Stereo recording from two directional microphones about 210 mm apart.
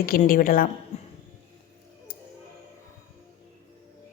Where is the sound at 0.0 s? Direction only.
45° left (ahead or behind).